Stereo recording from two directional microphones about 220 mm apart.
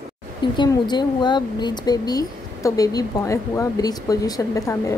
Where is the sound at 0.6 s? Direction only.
20° left (ahead or behind).